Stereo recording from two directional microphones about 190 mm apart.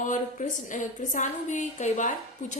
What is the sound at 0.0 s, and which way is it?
A woman's voice, 45° left (ahead or behind).